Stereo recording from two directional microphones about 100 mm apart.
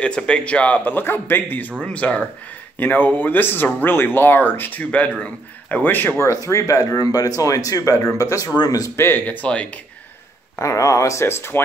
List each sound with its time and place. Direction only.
0.0 s speech: 10° left (ahead or behind)
6.4 s speech: 35° left (ahead or behind); by 9.7 s 15° left (ahead or behind)
10.6 s speech: 30° left (ahead or behind)